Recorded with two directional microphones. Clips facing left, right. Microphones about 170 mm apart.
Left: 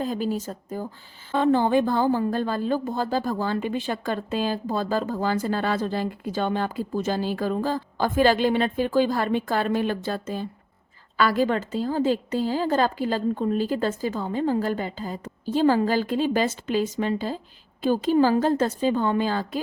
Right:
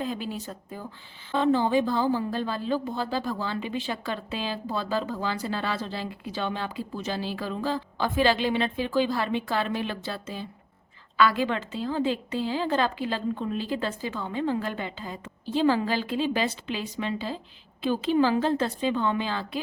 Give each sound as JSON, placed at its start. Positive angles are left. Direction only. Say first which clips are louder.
{"t": 0.0, "sound": "a woman's voice", "louder": "left 5 dB", "side_deg": 40}